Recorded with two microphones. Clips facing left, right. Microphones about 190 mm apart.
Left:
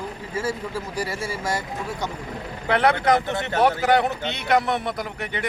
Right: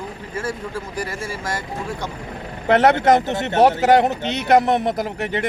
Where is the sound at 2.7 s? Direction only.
40° right (ahead or behind).